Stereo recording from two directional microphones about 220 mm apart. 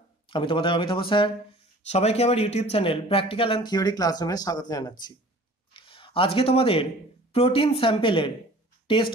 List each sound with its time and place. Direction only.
0.3 s speech: 25° left (ahead or behind)